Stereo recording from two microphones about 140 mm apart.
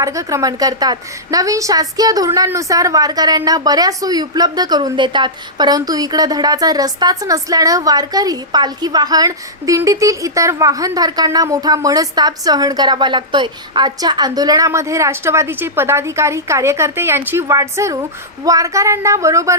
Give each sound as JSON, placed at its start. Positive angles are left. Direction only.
{"t": 0.0, "sound": "a woman's voice", "side_deg": -25}